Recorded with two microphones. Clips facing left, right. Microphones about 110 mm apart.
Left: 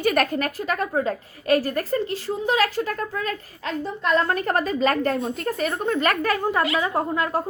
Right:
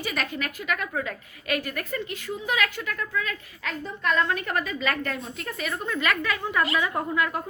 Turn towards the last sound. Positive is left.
turn(degrees=35)  # may be behind; listen again after turning